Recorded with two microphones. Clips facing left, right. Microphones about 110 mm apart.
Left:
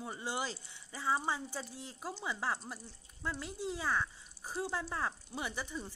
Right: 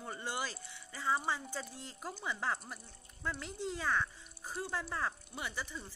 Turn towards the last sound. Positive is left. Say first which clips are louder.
# left 2 dB
turn(degrees=15)  # may be behind; listen again after turning